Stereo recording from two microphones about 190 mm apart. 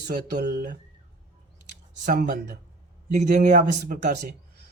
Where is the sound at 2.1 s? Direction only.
45° right (ahead or behind).